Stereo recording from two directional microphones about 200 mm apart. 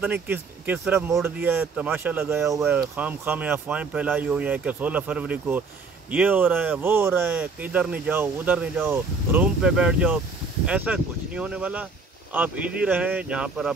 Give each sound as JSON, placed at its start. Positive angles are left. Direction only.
{"t": 0.0, "sound": "speech", "side_deg": -10}